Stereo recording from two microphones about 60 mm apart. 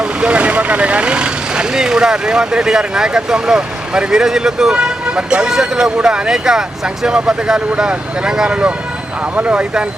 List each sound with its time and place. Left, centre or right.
0.0 s speech: centre